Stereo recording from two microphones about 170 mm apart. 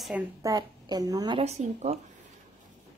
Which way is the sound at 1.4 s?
40° right (ahead or behind).